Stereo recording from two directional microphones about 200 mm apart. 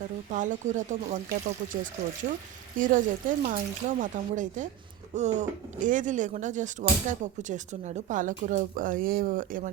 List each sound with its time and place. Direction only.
0.3 s speech: 40° right (ahead or behind)
2.3 s speech: 40° right (ahead or behind)